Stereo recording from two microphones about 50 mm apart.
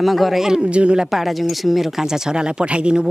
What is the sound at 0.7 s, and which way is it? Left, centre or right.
Speech, right.